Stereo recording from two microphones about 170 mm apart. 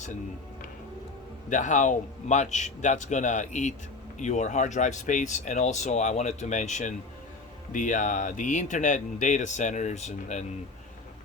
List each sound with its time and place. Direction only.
1.5 s speech: 45° left (ahead or behind)